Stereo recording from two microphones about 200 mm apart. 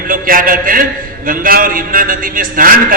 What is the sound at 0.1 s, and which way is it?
A man's voice, 45° right (ahead or behind).